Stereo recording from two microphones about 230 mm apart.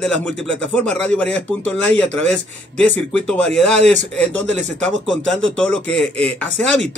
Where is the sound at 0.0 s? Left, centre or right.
Centre.